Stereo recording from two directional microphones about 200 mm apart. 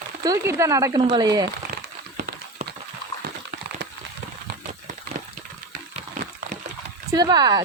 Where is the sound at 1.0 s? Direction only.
25° right (ahead or behind).